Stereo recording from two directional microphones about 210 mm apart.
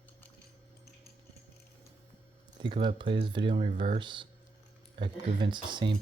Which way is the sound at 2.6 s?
25° right (ahead or behind).